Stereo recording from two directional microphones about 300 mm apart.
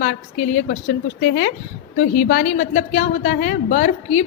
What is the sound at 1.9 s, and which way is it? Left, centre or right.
A woman's voice, left.